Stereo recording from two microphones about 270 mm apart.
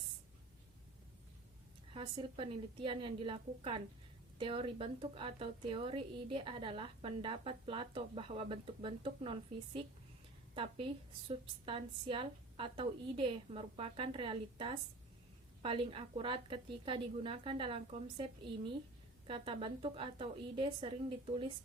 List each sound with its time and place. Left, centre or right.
1.9 s a woman's voice: centre